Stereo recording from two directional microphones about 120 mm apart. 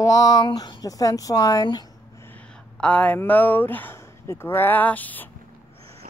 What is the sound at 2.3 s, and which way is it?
Speech, 10° left (ahead or behind).